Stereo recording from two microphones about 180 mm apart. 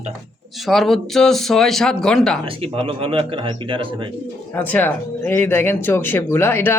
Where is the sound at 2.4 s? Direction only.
35° right (ahead or behind).